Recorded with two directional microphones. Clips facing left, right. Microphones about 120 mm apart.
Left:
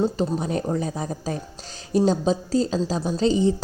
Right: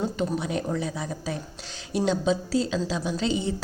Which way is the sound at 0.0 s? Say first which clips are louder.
Left 4 dB; 35° left (ahead or behind).